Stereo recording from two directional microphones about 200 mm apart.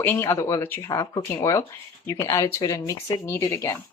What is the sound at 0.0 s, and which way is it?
Speech, 10° left (ahead or behind).